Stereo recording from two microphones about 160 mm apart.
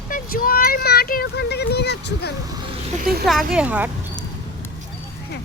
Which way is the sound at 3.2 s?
Centre (ahead or behind).